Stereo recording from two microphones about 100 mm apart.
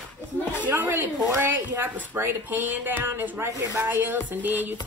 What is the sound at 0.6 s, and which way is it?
A woman's voice, 20° right (ahead or behind).